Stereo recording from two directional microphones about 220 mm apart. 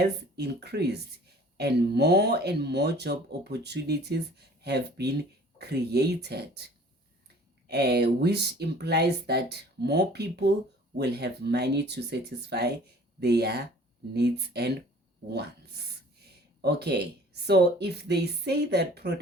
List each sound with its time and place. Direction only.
0.0 s speech: 50° right (ahead or behind)
7.7 s speech: 45° right (ahead or behind)
16.6 s speech: 50° right (ahead or behind)